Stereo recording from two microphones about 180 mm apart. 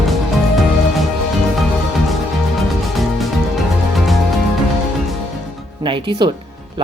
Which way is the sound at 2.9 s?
Centre (ahead or behind).